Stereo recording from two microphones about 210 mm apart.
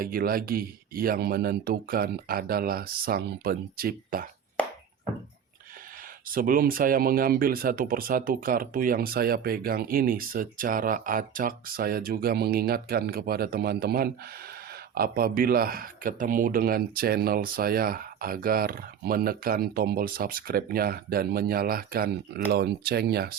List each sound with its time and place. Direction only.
0.0 s speech: 45° right (ahead or behind)
6.2 s speech: 40° right (ahead or behind)